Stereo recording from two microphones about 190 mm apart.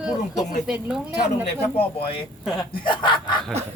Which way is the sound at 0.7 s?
5° right (ahead or behind).